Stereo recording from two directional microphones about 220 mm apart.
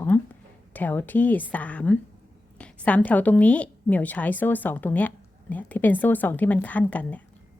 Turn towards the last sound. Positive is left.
turn(degrees=5)  # may be behind; listen again after turning